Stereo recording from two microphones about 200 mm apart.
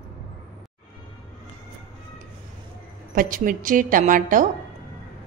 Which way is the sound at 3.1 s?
45° right (ahead or behind).